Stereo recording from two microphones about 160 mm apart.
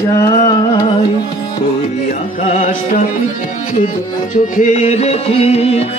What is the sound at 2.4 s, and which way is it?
Music, 55° left (ahead or behind).